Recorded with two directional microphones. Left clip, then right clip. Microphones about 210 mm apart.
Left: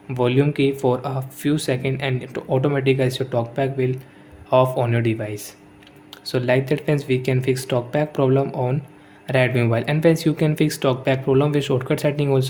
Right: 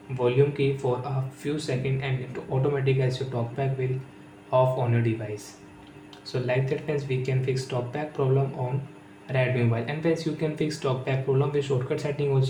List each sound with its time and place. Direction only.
0.2 s speech: 55° left (ahead or behind)